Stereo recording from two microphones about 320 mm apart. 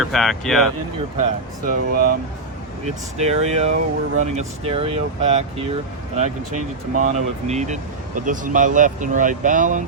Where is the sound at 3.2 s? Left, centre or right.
Centre.